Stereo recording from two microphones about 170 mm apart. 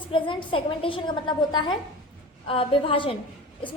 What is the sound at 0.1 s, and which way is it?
A woman's voice, 30° left (ahead or behind).